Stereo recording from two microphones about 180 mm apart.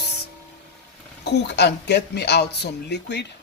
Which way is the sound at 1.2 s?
70° left (ahead or behind).